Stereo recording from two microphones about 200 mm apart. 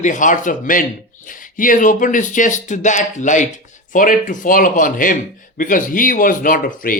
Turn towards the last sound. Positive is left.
turn(degrees=45)  # may be behind; listen again after turning